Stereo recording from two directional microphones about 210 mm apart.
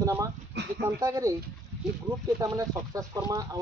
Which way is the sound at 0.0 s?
15° right (ahead or behind).